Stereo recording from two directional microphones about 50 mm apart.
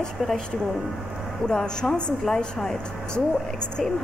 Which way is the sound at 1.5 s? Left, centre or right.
Centre.